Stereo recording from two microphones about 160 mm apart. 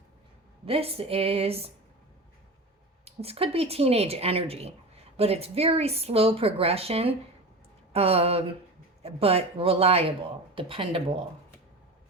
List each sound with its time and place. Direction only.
0.6 s speech: 35° right (ahead or behind)
3.0 s speech: 40° right (ahead or behind)